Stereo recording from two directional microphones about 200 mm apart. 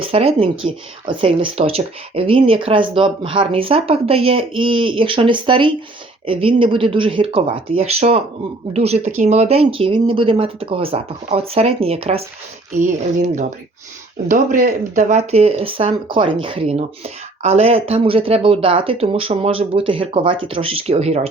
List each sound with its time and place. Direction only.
0.0 s speech: 30° right (ahead or behind)
14.3 s speech: 40° right (ahead or behind)